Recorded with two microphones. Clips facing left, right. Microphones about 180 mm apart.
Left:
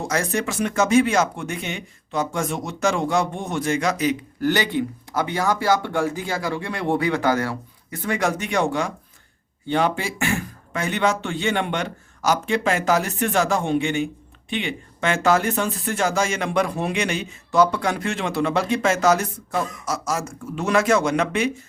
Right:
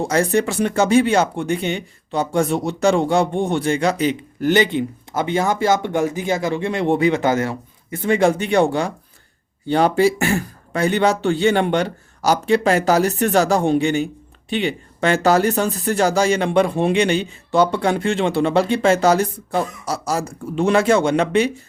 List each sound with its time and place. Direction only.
0.0 s speech: 30° right (ahead or behind)